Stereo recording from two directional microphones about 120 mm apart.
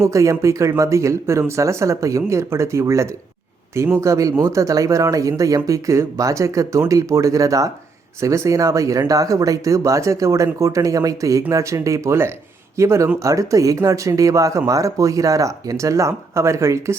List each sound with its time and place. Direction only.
0.0 s speech: 25° right (ahead or behind)